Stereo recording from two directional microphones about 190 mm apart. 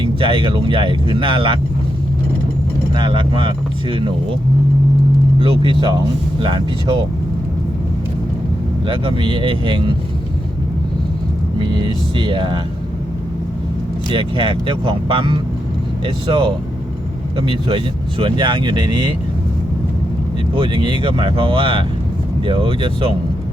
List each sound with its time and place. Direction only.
0.0 s speech: 25° right (ahead or behind)
2.9 s speech: 25° right (ahead or behind)
5.4 s speech: 25° right (ahead or behind)
8.9 s speech: 25° right (ahead or behind)
11.6 s speech: 25° right (ahead or behind)
14.1 s speech: 25° right (ahead or behind)
17.7 s speech: 25° right (ahead or behind)
20.6 s speech: 25° right (ahead or behind)